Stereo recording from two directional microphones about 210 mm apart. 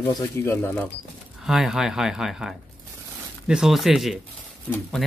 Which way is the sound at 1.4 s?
Centre (ahead or behind).